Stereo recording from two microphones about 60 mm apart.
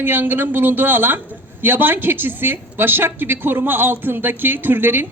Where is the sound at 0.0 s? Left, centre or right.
Right.